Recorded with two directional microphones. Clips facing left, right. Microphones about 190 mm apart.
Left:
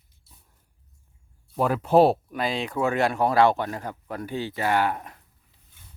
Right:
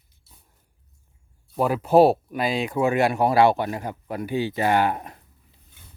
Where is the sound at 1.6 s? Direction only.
5° right (ahead or behind); by 5.2 s 25° right (ahead or behind).